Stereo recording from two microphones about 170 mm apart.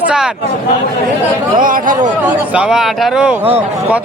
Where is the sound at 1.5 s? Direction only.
55° right (ahead or behind).